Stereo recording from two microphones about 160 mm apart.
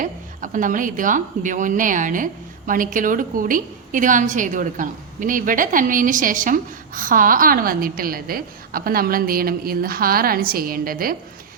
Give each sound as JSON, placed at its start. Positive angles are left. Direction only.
{"t": 0.0, "sound": "a woman's voice", "side_deg": -55}